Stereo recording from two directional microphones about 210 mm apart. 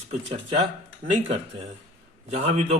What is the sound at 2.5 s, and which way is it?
Speech, 30° right (ahead or behind).